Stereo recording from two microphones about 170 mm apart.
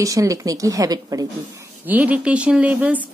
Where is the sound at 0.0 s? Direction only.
20° right (ahead or behind).